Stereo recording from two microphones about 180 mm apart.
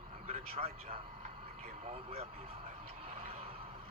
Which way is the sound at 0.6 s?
30° right (ahead or behind).